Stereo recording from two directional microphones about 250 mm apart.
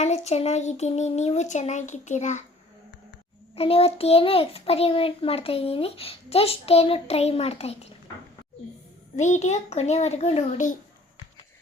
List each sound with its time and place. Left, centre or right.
0.0 s a child's voice: left
3.5 s a child's voice: left
9.1 s a child's voice: left